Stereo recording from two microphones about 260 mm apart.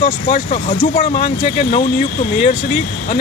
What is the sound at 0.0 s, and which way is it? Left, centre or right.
Speech, left.